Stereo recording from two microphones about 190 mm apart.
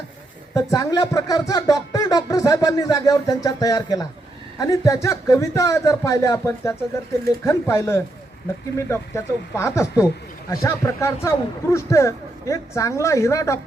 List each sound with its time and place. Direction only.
0.5 s speech: 20° left (ahead or behind)